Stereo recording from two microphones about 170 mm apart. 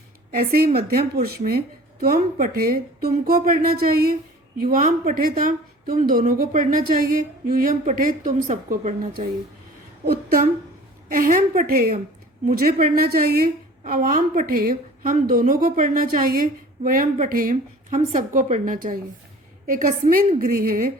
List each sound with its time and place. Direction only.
0.3 s a woman's voice: 60° right (ahead or behind); by 9.0 s 45° right (ahead or behind)
10.1 s a woman's voice: 60° right (ahead or behind)